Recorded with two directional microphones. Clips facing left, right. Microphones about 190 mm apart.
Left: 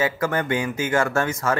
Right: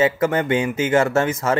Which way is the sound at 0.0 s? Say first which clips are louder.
Right 5 dB; 25° right (ahead or behind).